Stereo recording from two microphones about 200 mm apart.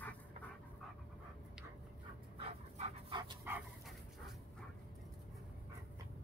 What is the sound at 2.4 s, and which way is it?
Dog, 30° right (ahead or behind).